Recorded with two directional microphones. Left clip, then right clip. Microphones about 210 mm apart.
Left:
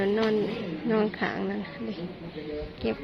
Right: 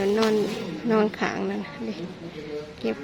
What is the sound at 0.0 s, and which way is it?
A woman's voice, 15° right (ahead or behind).